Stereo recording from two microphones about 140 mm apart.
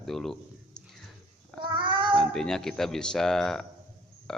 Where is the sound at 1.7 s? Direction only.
35° right (ahead or behind).